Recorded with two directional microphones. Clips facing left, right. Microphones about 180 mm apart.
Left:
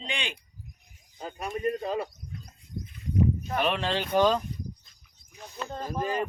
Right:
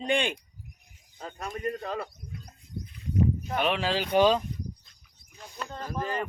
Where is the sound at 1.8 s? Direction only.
15° left (ahead or behind).